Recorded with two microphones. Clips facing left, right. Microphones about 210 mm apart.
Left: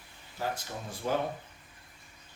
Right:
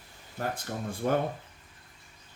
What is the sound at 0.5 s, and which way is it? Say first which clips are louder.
Speech: right 4 dB; 55° right (ahead or behind).